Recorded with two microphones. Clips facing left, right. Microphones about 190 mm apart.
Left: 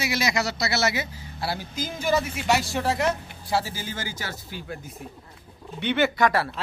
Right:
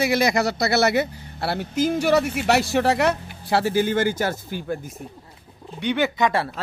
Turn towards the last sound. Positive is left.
turn(degrees=-15)  # may be behind; listen again after turning